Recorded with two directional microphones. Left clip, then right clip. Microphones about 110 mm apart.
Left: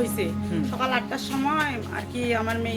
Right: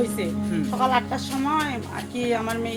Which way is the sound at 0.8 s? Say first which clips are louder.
Right 5 dB; 20° left (ahead or behind).